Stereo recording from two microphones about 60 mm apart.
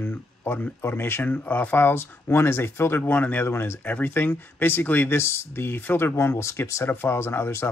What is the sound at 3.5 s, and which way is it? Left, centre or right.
Speech, left.